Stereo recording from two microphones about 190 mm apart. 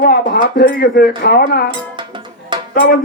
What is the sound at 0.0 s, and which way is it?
Speech, 50° left (ahead or behind).